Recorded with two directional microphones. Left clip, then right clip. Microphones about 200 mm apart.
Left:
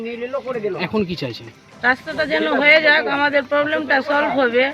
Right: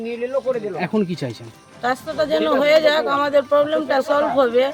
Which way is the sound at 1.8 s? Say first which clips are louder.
Left 2 dB; 20° right (ahead or behind).